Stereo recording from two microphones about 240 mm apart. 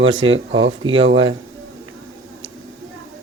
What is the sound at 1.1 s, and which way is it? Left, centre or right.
Speech, right.